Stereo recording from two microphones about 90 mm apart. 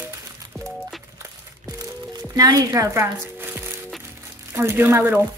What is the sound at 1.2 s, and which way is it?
Music, 45° right (ahead or behind).